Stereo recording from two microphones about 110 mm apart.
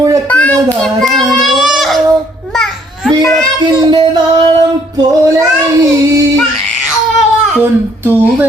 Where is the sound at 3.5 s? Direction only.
40° right (ahead or behind).